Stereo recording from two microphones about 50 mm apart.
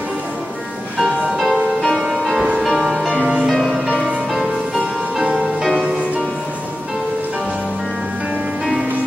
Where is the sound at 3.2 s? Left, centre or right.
Centre.